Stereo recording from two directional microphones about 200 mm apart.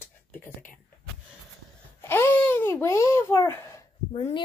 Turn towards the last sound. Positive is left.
turn(degrees=25)  # may be behind; listen again after turning